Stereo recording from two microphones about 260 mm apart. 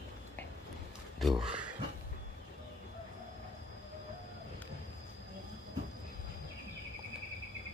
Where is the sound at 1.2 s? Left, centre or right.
Centre.